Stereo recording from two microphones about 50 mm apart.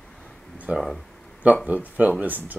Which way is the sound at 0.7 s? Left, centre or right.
Right.